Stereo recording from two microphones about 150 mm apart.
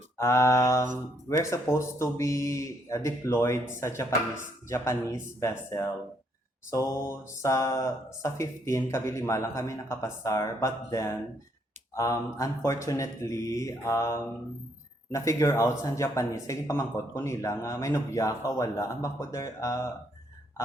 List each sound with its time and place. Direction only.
0.2 s speech: 20° left (ahead or behind)